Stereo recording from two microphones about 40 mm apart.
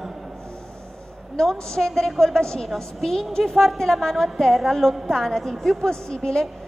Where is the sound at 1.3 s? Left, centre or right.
Centre.